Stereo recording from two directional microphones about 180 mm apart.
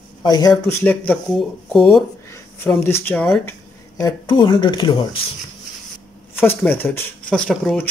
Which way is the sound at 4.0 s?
20° left (ahead or behind).